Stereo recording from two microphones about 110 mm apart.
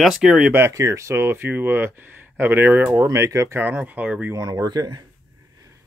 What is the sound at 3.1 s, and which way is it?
Speech, 30° right (ahead or behind).